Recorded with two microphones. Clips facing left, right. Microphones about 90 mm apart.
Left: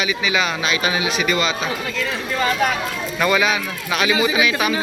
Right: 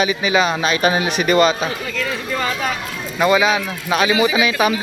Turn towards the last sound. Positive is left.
turn(degrees=-30)  # may be behind; listen again after turning